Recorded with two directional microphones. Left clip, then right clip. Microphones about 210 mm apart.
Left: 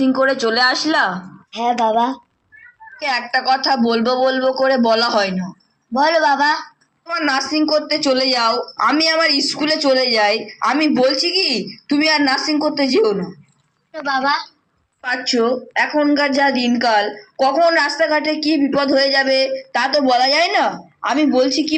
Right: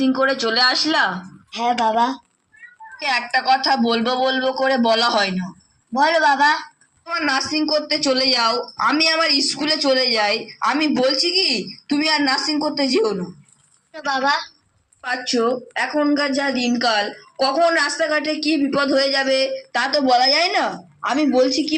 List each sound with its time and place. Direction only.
0.0 s a woman's voice: 25° left (ahead or behind)